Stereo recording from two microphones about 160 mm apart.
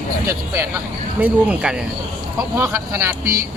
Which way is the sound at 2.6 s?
15° right (ahead or behind).